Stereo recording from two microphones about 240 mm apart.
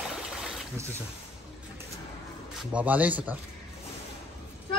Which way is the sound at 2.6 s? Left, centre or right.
Centre.